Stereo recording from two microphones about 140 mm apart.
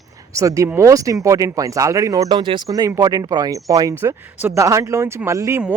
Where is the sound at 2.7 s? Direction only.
25° right (ahead or behind).